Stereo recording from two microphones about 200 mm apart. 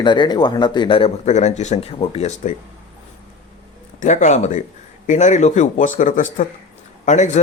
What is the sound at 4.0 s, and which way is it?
A man's voice, 35° left (ahead or behind).